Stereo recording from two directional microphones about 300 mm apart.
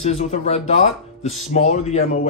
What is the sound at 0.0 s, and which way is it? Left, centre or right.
Speech, left.